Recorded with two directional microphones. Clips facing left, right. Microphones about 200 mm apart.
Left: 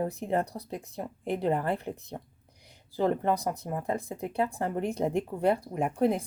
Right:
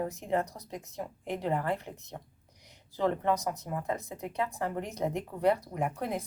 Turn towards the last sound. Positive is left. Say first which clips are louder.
# left 6 dB
turn(degrees=30)  # may be behind; listen again after turning